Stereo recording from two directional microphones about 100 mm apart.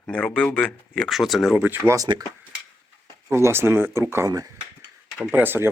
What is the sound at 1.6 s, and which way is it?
Speech, 20° right (ahead or behind).